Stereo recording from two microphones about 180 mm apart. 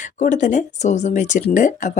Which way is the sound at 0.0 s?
45° left (ahead or behind).